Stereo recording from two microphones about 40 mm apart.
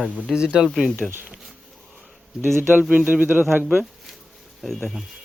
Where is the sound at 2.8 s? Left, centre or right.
Right.